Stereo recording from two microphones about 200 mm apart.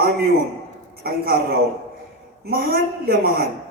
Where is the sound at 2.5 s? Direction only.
50° right (ahead or behind).